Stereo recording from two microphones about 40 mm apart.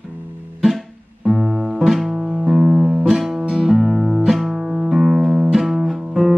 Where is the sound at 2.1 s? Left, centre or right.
Right.